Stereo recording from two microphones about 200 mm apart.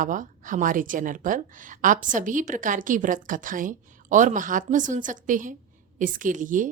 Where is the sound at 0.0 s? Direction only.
40° right (ahead or behind).